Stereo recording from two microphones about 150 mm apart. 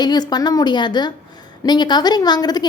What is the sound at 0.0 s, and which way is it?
A woman's voice, 30° left (ahead or behind).